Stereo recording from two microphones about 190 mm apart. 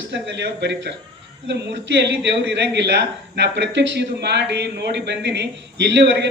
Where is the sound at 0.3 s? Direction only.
65° right (ahead or behind).